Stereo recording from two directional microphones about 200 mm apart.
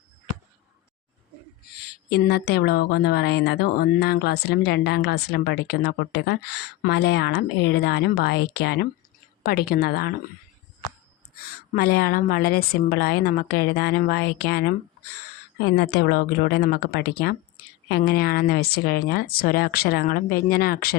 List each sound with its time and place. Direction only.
1.7 s speech: 55° left (ahead or behind)
11.3 s speech: 50° left (ahead or behind)
15.6 s speech: 55° left (ahead or behind)